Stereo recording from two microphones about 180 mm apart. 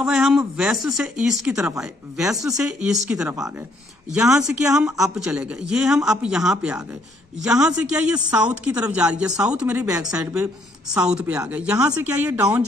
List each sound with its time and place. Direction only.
0.0 s a man's voice: centre (ahead or behind)
9.7 s a woman's voice: 15° right (ahead or behind)
10.3 s a woman's voice: 5° right (ahead or behind)